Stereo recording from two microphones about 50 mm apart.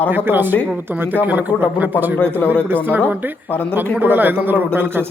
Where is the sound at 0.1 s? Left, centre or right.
Right.